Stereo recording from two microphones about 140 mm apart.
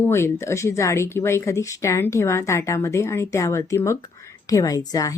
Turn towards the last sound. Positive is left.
turn(degrees=25)  # may be behind; listen again after turning